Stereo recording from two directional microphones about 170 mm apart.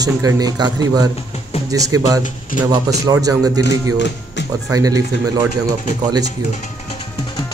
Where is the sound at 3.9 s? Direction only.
90° left.